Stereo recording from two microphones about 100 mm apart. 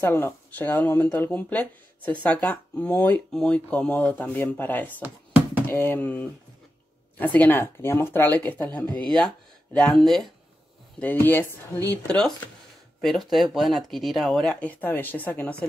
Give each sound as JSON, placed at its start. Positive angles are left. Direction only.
{"t": 0.0, "sound": "speech", "side_deg": 20}
{"t": 11.0, "sound": "speech", "side_deg": 20}